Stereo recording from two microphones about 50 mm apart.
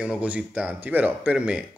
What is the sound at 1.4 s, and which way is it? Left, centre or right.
Speech, centre.